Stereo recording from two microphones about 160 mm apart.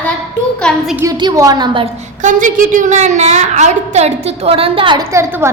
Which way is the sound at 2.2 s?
55° right (ahead or behind).